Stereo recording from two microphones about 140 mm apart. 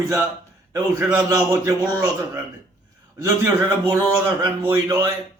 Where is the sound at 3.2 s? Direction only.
25° right (ahead or behind).